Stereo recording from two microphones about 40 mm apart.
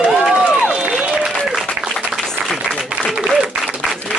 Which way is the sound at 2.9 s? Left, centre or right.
Right.